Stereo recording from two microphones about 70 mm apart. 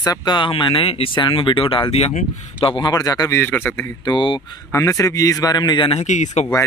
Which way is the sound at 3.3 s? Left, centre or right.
Left.